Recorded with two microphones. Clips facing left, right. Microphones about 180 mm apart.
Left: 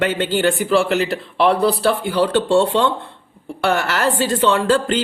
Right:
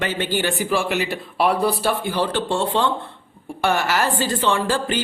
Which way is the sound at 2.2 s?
70° left (ahead or behind).